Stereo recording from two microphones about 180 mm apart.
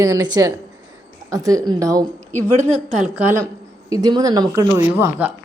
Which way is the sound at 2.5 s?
40° right (ahead or behind).